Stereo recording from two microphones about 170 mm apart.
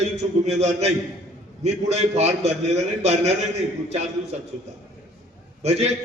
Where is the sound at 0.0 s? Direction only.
40° right (ahead or behind).